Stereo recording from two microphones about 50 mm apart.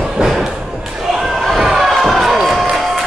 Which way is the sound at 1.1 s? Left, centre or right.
Centre.